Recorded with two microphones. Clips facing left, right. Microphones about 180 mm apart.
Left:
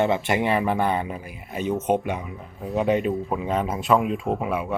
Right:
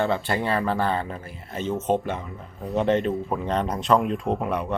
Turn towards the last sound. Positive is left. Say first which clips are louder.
# even
turn(degrees=5)  # may be behind; listen again after turning